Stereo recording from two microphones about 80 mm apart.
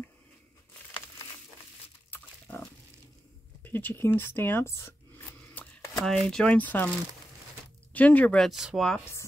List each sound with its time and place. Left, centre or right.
2.5 s pig: centre
3.6 s speech: left
5.6 s shuffling cards: left
5.9 s speech: centre; by 6.9 s left
7.9 s speech: left
8.5 s speech: centre